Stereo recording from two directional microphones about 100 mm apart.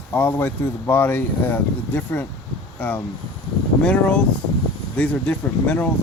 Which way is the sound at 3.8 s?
10° left (ahead or behind).